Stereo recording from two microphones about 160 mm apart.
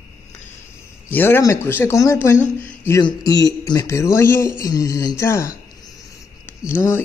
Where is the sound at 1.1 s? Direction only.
15° left (ahead or behind).